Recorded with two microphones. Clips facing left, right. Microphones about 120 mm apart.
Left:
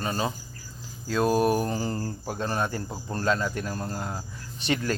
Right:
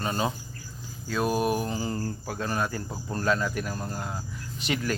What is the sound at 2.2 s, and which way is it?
Speech, 25° left (ahead or behind).